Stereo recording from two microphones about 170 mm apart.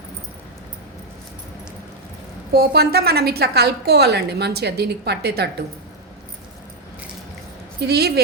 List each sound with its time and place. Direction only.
2.5 s a woman's voice: 70° right (ahead or behind)
7.8 s a woman's voice: 75° right (ahead or behind)